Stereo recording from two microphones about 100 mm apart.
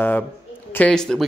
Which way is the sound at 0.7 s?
15° left (ahead or behind).